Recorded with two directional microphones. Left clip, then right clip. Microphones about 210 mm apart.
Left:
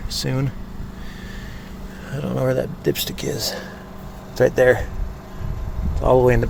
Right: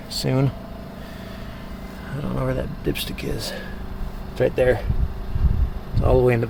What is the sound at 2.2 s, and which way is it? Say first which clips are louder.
Speech: left 5 dB; 15° left (ahead or behind).